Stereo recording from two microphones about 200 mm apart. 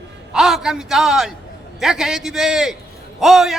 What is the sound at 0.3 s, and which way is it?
A man's voice, centre (ahead or behind).